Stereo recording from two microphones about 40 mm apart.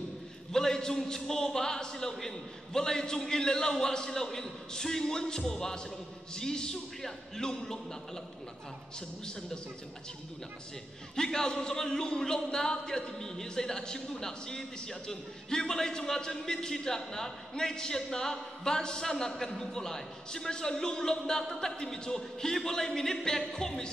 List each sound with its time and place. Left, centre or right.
0.5 s speech: centre
11.1 s speech: centre